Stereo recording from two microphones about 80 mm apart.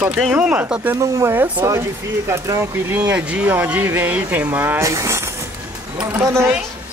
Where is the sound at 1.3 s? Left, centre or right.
Right.